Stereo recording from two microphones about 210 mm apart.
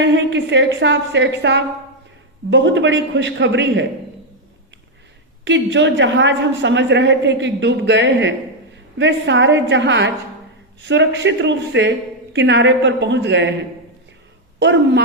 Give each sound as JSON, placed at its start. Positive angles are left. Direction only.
{"t": 0.0, "sound": "a woman's voice", "side_deg": -60}
{"t": 5.5, "sound": "a woman's voice", "side_deg": -60}
{"t": 14.6, "sound": "a woman's voice", "side_deg": -55}